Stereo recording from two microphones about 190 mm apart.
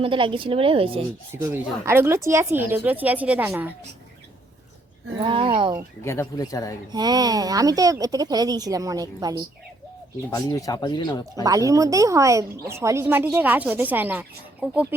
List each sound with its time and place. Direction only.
0.0 s speech: 25° right (ahead or behind)
1.3 s a woman's voice: 15° right (ahead or behind)
5.2 s speech: 25° right (ahead or behind)
6.1 s speech: 15° left (ahead or behind)
6.9 s speech: 20° right (ahead or behind)
10.2 s speech: 15° left (ahead or behind)
11.4 s a woman's voice: 20° right (ahead or behind)